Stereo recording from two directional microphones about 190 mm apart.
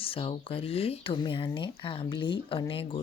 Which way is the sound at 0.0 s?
30° left (ahead or behind).